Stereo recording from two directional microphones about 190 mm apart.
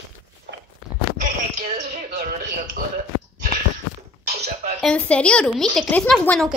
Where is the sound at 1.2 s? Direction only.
40° right (ahead or behind).